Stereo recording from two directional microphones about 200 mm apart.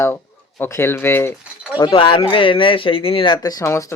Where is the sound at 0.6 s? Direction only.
10° left (ahead or behind).